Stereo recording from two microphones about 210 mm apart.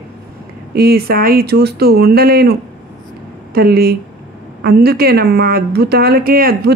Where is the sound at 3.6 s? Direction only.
50° right (ahead or behind).